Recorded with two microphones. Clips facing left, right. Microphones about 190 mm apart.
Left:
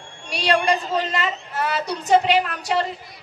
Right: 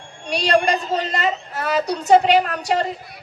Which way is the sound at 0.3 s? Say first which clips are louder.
Right 2 dB; 35° right (ahead or behind).